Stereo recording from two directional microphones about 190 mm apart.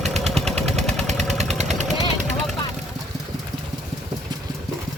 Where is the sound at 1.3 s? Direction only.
35° right (ahead or behind).